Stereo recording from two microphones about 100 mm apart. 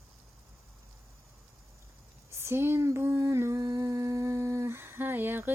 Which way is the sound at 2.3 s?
25° right (ahead or behind).